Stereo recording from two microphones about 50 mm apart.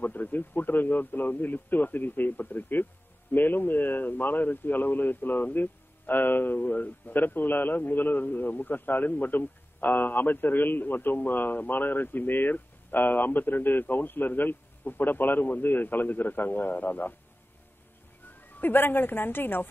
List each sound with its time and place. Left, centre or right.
0.0 s speech: left
18.4 s a woman's voice: left